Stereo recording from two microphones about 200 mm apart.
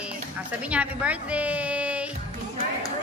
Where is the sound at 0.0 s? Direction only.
5° right (ahead or behind).